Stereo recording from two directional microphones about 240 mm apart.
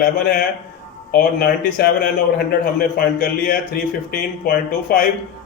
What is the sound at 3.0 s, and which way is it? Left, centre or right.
Speech, left.